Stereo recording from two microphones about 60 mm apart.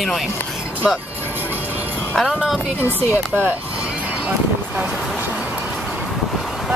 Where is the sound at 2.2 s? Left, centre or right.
Centre.